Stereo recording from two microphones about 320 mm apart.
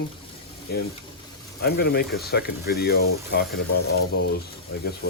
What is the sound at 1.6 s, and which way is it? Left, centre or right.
Speech, left.